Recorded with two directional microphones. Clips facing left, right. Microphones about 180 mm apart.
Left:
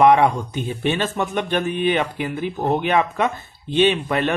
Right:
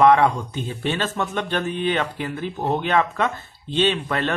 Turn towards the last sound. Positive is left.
turn(degrees=15)  # may be behind; listen again after turning